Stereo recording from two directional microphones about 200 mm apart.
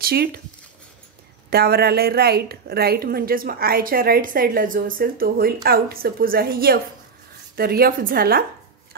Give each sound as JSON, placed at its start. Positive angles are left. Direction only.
{"t": 0.0, "sound": "speech", "side_deg": -50}
{"t": 1.5, "sound": "a woman's voice", "side_deg": -50}